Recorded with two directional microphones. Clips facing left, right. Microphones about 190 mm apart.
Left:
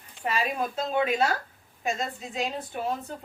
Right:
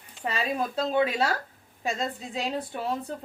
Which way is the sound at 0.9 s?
30° right (ahead or behind).